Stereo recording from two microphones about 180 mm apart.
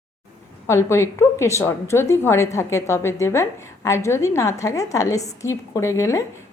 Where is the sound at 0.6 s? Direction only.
15° left (ahead or behind).